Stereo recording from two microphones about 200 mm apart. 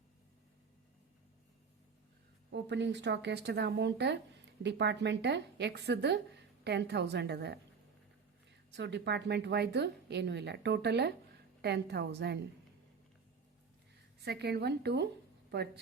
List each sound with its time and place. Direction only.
2.5 s a woman's voice: 60° right (ahead or behind)
8.7 s a woman's voice: 60° right (ahead or behind)
14.2 s a woman's voice: 55° right (ahead or behind)